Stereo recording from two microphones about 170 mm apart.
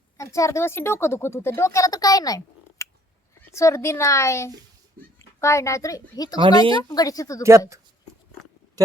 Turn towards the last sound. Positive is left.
turn(degrees=-15)  # may be behind; listen again after turning